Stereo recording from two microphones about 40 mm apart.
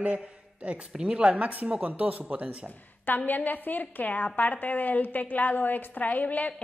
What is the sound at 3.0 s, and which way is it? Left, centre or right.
A woman's voice, left.